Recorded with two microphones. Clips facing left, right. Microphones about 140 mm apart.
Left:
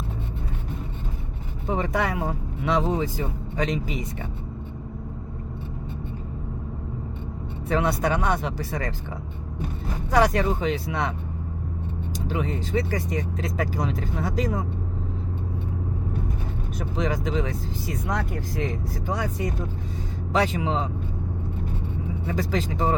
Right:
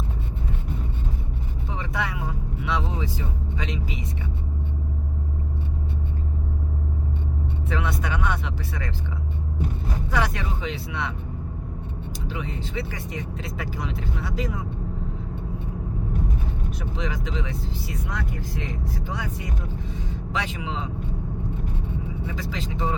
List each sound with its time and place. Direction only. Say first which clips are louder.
1.6 s vehicle: left 6 dB; 50° left (ahead or behind)
7.7 s speech: left 7 dB; 40° left (ahead or behind)
10.1 s speech: left 7 dB; 40° left (ahead or behind)
12.3 s speech: left 7 dB; 45° left (ahead or behind)
17.0 s speech: left 6 dB; 45° left (ahead or behind)
22.3 s speech: left 9 dB; 45° left (ahead or behind)